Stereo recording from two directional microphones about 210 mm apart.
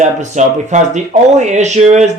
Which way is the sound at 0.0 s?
35° right (ahead or behind).